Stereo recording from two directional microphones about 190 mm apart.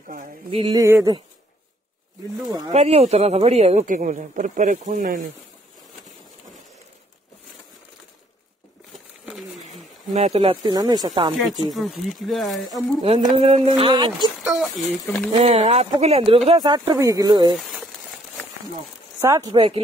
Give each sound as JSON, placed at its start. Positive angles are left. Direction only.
{"t": 0.5, "sound": "speech", "side_deg": -25}
{"t": 0.8, "sound": "speech", "side_deg": -15}
{"t": 2.7, "sound": "speech", "side_deg": -35}
{"t": 8.9, "sound": "patter", "side_deg": -5}
{"t": 9.7, "sound": "speech", "side_deg": -35}
{"t": 11.7, "sound": "speech", "side_deg": 0}
{"t": 13.0, "sound": "speech", "side_deg": -30}
{"t": 14.4, "sound": "a sound", "side_deg": 0}
{"t": 15.3, "sound": "speech", "side_deg": -35}
{"t": 19.2, "sound": "speech", "side_deg": -15}